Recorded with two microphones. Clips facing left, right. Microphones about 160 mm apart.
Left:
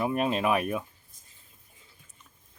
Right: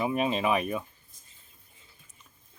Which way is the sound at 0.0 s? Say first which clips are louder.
Even; centre (ahead or behind).